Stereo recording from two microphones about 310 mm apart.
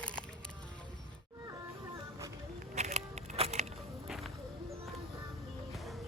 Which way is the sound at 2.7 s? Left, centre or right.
Right.